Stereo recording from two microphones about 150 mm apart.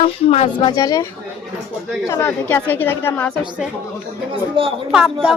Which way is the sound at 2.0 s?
15° left (ahead or behind).